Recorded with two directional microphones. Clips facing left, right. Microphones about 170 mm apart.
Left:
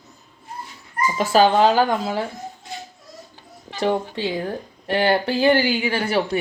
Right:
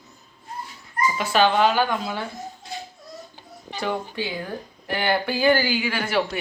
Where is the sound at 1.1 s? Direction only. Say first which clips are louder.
Left 5 dB; 35° left (ahead or behind).